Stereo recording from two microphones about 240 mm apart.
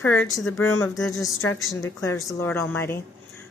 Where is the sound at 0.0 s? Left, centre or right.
Left.